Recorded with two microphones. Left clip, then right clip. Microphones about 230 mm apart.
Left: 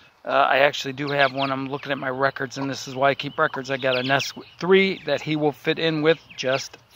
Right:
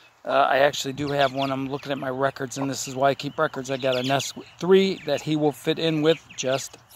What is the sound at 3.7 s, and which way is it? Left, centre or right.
Speech, centre.